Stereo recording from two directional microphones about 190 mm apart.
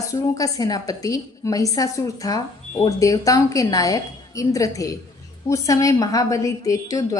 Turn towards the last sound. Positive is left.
turn(degrees=15)  # may be behind; listen again after turning